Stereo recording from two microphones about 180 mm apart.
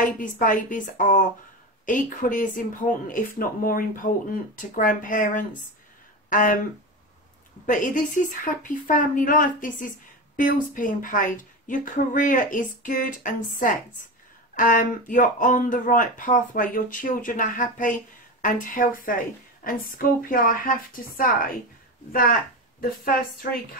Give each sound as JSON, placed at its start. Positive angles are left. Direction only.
{"t": 0.2, "sound": "speech", "side_deg": 45}
{"t": 7.6, "sound": "speech", "side_deg": 45}